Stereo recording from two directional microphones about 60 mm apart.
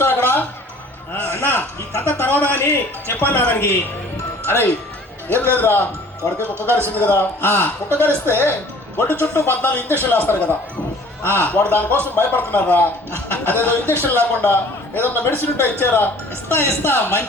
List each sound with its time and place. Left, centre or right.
0.0 s a sound: left
2.0 s a man's voice: left
6.8 s a man's voice: left